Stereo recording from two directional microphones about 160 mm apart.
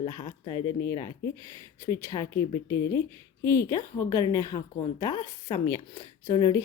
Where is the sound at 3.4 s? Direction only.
20° left (ahead or behind).